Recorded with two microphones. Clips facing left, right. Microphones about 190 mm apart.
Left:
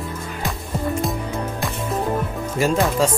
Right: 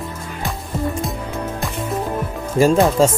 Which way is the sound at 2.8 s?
45° right (ahead or behind).